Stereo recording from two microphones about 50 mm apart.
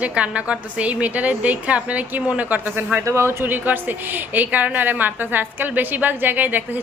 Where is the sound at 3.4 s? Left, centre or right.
Right.